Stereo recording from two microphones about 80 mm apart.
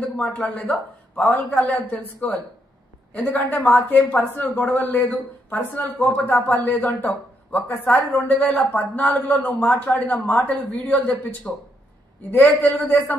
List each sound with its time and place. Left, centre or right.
0.2 s a man's voice: centre